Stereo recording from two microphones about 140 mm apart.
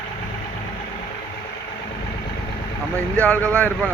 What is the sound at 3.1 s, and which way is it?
Speech, 10° left (ahead or behind).